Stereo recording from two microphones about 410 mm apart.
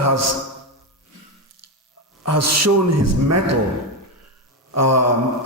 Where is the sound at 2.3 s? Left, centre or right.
Right.